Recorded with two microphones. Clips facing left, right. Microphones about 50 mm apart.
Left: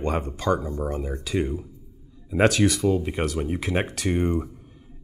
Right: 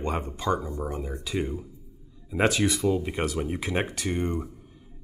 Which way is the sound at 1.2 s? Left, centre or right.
Centre.